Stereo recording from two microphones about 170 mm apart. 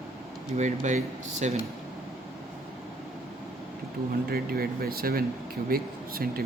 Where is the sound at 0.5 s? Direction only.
45° right (ahead or behind).